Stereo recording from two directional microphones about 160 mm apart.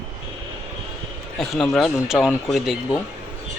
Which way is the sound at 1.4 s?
Centre (ahead or behind).